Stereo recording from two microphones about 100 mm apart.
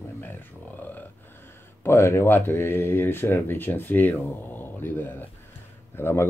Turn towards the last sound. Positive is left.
turn(degrees=25)  # may be behind; listen again after turning